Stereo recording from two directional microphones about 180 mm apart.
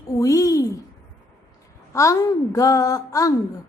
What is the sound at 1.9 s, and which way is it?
A woman's voice, 15° left (ahead or behind).